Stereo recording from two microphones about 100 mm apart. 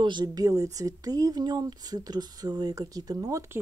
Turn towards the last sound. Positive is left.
turn(degrees=-35)  # may be behind; listen again after turning